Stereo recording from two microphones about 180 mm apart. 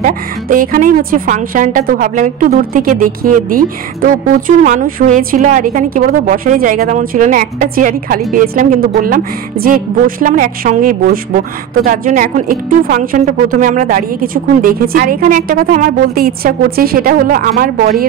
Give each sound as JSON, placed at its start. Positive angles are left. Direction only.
{"t": 0.0, "sound": "a woman's voice", "side_deg": -50}